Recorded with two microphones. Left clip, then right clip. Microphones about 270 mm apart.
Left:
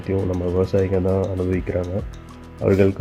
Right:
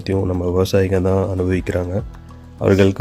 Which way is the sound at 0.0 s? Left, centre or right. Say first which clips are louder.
Right 3 dB; right.